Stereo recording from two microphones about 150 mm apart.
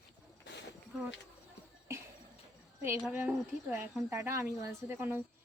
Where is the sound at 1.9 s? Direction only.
20° right (ahead or behind).